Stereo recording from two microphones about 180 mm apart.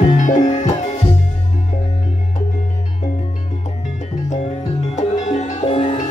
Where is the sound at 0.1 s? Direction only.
45° left (ahead or behind).